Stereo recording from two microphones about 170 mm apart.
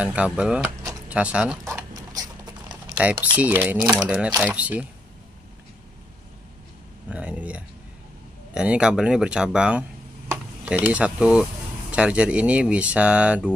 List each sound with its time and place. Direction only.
0.0 s speech: 5° right (ahead or behind)
1.6 s a sound: 15° right (ahead or behind)
2.7 s typing: 5° right (ahead or behind)
3.3 s speech: 10° right (ahead or behind)
3.8 s speech: 20° right (ahead or behind)
4.4 s speech: 10° right (ahead or behind)
7.1 s speech: 10° right (ahead or behind)